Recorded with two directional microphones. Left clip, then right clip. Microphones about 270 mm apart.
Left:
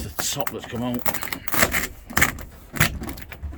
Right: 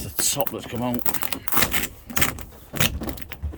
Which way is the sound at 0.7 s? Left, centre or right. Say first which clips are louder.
Even; centre.